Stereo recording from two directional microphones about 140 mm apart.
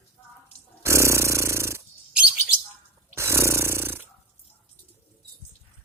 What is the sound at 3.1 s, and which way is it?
Snoring, 20° right (ahead or behind).